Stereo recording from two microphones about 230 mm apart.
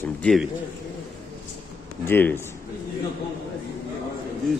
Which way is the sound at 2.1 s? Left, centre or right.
Centre.